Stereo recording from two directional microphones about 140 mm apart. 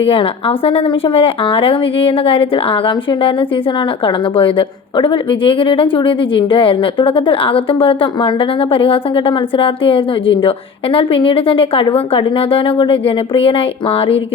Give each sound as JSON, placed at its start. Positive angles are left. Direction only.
{"t": 0.0, "sound": "a woman's voice", "side_deg": 40}